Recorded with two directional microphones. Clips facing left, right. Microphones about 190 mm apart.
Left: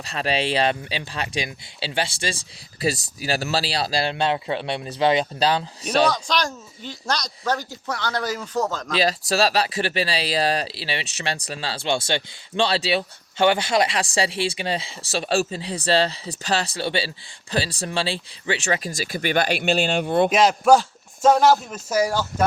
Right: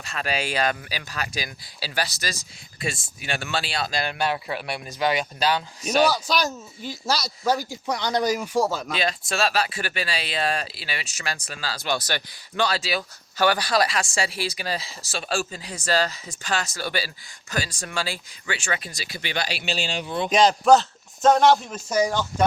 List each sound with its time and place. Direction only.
0.0 s speech: 30° left (ahead or behind)
6.1 s speech: 5° right (ahead or behind)
9.0 s speech: 35° left (ahead or behind); by 20.3 s 55° left (ahead or behind)
20.3 s a man's voice: 5° left (ahead or behind)